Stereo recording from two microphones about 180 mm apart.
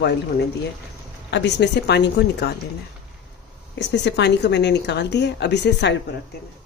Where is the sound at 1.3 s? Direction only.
75° left (ahead or behind).